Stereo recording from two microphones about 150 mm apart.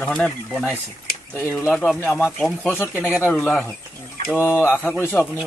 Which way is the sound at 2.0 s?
15° left (ahead or behind).